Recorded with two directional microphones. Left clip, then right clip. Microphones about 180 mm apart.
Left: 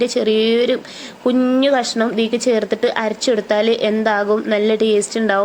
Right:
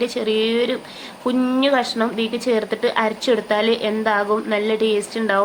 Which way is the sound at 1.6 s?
25° left (ahead or behind).